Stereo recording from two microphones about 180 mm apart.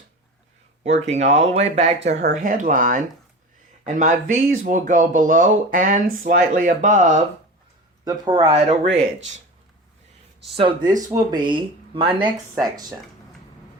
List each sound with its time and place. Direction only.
0.9 s speech: 40° right (ahead or behind)
8.0 s speech: 20° right (ahead or behind)
8.5 s speech: 35° right (ahead or behind)
10.5 s speech: 30° right (ahead or behind)